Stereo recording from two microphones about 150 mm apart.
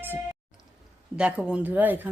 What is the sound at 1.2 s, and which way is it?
Speech, 5° right (ahead or behind).